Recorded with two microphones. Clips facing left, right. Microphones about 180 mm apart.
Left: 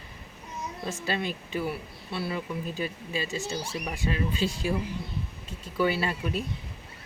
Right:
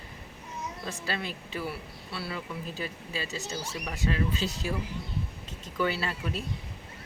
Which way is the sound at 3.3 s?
40° right (ahead or behind).